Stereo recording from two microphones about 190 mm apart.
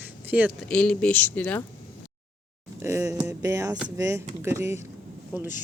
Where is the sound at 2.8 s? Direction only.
15° right (ahead or behind).